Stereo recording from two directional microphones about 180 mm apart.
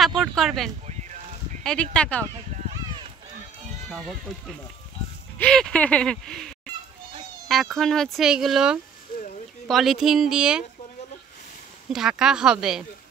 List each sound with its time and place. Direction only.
0.2 s speech: centre (ahead or behind)
0.8 s a sound: 40° right (ahead or behind)
1.6 s speech: 5° left (ahead or behind)
2.5 s a sound: 35° right (ahead or behind)
3.9 s speech: centre (ahead or behind)
11.9 s speech: 5° right (ahead or behind)